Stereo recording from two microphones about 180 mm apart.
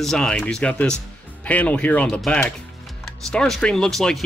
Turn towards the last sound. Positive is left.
turn(degrees=0)  # may be behind; listen again after turning